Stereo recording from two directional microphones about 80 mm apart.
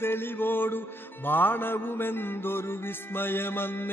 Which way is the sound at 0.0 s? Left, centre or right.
Left.